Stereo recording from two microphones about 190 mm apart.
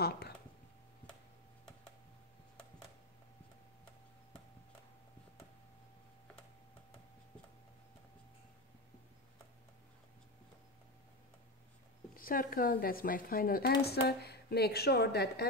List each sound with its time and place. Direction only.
12.2 s a woman's voice: 50° left (ahead or behind)